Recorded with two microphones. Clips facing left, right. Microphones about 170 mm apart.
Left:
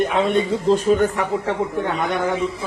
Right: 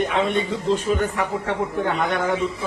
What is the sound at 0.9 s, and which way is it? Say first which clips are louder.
Speech: left 7 dB; 45° left (ahead or behind).